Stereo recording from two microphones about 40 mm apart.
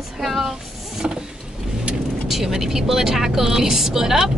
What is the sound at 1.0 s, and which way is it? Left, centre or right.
Vehicle, right.